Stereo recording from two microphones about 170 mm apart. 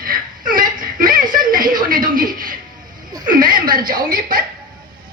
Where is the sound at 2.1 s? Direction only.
55° right (ahead or behind).